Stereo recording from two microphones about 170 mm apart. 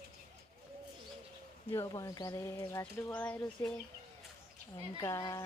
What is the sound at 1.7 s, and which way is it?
Speech, 15° left (ahead or behind).